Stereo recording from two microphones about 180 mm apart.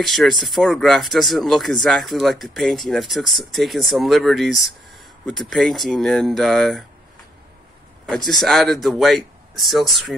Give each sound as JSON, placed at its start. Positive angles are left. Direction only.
{"t": 0.0, "sound": "speech", "side_deg": 0}
{"t": 8.3, "sound": "speech", "side_deg": 0}